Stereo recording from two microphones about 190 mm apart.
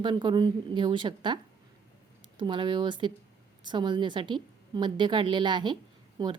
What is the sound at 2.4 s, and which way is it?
Speech, 25° right (ahead or behind).